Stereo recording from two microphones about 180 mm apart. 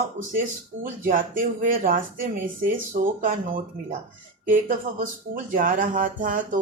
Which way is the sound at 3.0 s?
50° right (ahead or behind).